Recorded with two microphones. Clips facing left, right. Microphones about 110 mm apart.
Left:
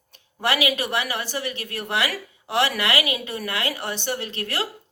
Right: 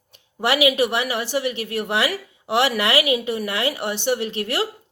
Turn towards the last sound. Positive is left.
turn(degrees=-25)  # may be behind; listen again after turning